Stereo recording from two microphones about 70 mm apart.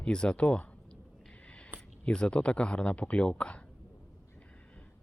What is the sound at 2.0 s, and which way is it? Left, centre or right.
Speech, centre.